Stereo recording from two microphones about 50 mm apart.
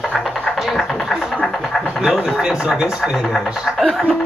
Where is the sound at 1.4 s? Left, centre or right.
Centre.